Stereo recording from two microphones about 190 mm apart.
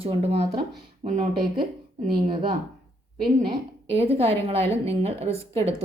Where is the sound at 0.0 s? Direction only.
30° right (ahead or behind).